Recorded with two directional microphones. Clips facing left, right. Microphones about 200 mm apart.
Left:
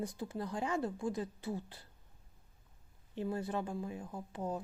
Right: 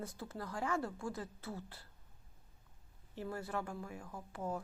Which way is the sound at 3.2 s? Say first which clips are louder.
Left 4 dB; 20° left (ahead or behind).